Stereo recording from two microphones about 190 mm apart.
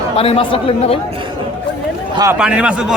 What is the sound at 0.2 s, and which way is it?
Speech, 30° left (ahead or behind).